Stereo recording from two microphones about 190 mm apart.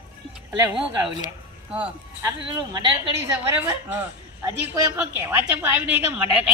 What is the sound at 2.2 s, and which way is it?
Speech, 20° right (ahead or behind).